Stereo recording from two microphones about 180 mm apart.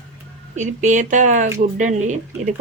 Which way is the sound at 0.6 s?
45° right (ahead or behind).